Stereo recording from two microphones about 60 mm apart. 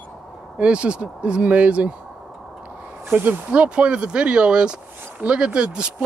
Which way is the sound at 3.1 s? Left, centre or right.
Right.